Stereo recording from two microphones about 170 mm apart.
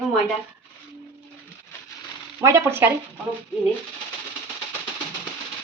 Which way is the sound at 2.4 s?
15° right (ahead or behind).